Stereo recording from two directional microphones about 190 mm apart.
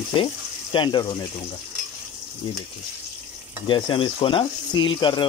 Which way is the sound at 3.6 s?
25° left (ahead or behind).